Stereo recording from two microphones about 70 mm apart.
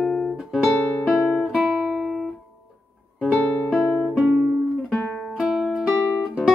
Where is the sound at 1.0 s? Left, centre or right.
Centre.